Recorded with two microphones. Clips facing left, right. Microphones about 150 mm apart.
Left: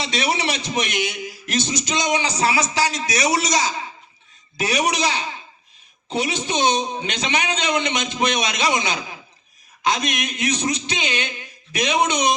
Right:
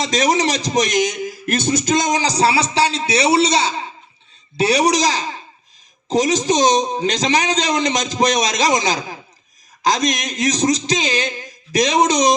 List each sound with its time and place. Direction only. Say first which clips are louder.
0.0 s a man's voice: right 6 dB; 40° right (ahead or behind)